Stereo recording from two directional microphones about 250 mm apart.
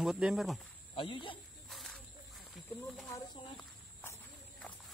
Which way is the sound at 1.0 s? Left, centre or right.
Centre.